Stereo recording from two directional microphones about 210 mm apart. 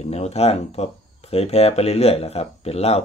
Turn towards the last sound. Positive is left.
turn(degrees=30)  # may be behind; listen again after turning